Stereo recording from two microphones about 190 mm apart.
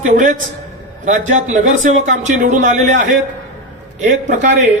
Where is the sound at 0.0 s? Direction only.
40° right (ahead or behind).